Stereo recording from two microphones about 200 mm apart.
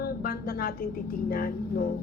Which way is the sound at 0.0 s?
50° left (ahead or behind).